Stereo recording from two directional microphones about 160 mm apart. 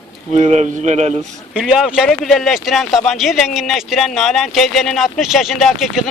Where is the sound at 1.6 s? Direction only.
5° right (ahead or behind).